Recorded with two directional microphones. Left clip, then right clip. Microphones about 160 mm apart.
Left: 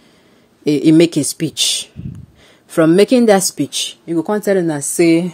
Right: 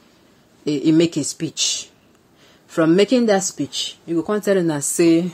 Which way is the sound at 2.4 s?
45° left (ahead or behind).